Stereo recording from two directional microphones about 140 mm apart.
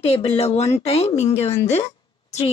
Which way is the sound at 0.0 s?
45° left (ahead or behind).